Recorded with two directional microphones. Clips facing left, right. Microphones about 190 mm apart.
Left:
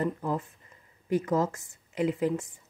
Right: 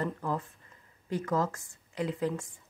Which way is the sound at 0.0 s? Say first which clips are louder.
Left 3 dB; 20° left (ahead or behind).